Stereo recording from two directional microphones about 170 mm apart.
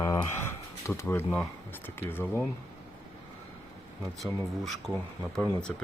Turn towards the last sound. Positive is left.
turn(degrees=5)  # may be behind; listen again after turning